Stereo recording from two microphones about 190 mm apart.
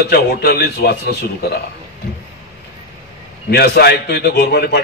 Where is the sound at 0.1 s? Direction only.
55° left (ahead or behind).